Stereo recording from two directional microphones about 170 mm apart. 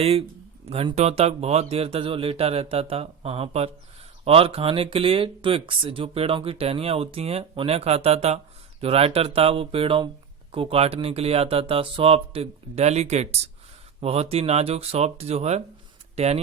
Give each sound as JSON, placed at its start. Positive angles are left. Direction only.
{"t": 0.0, "sound": "speech", "side_deg": -35}